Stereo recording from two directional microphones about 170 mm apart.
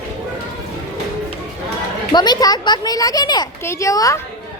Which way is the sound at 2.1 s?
25° left (ahead or behind).